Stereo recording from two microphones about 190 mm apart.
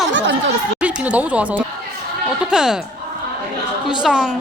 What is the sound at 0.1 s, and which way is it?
Speech, 70° right (ahead or behind).